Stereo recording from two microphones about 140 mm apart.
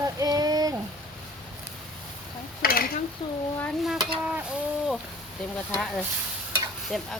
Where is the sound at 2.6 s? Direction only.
90° left.